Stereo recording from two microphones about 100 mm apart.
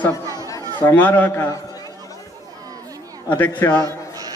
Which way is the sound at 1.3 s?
30° left (ahead or behind).